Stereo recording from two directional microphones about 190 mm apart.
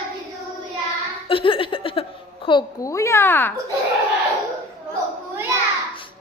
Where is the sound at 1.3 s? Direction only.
30° left (ahead or behind); by 3.5 s 10° left (ahead or behind).